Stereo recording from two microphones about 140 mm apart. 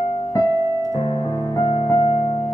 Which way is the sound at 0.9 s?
35° left (ahead or behind).